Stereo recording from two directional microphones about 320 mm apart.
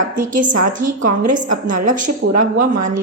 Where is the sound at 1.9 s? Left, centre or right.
Right.